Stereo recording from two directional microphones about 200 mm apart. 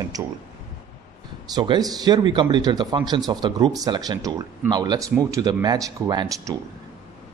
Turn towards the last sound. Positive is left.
turn(degrees=-20)  # may be behind; listen again after turning